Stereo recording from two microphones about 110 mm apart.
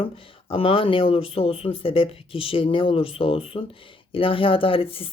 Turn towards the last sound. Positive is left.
turn(degrees=55)  # may be behind; listen again after turning